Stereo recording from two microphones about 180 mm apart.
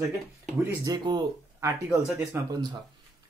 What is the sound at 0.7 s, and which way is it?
Speech, 20° right (ahead or behind).